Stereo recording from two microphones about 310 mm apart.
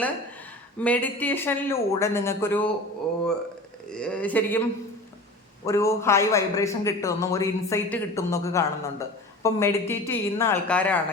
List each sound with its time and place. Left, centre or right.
0.8 s a man's voice: centre
3.9 s a woman's voice: centre
5.6 s a man's voice: centre